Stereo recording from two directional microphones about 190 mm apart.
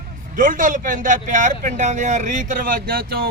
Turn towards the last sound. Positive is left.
turn(degrees=-50)  # may be behind; listen again after turning